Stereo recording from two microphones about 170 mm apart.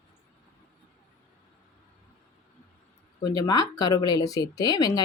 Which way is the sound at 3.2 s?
20° left (ahead or behind).